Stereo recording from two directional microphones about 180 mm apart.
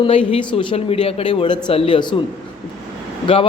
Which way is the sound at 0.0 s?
30° left (ahead or behind).